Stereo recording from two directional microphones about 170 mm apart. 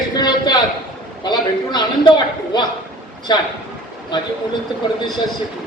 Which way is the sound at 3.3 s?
25° left (ahead or behind).